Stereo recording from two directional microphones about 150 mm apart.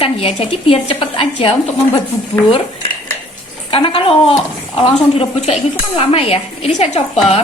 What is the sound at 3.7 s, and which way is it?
A woman's voice, 40° left (ahead or behind).